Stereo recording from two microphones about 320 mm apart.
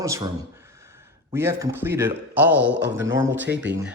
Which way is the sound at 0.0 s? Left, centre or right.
Centre.